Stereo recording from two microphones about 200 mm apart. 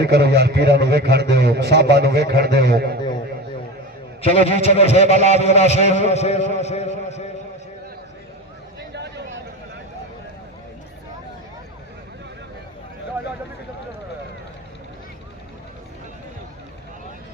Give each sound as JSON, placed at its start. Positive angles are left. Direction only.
{"t": 0.0, "sound": "a man's voice", "side_deg": -55}
{"t": 4.2, "sound": "a man's voice", "side_deg": 30}
{"t": 8.9, "sound": "a sound", "side_deg": -60}